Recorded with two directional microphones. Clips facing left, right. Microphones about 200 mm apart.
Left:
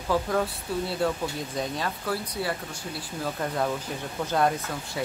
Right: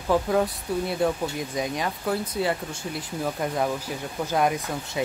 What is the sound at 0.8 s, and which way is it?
Speech, 15° right (ahead or behind).